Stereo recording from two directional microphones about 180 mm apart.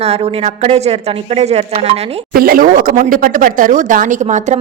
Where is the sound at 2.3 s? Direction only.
55° right (ahead or behind).